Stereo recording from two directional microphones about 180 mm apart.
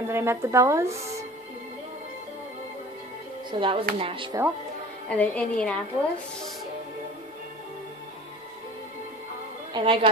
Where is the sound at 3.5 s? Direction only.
30° right (ahead or behind).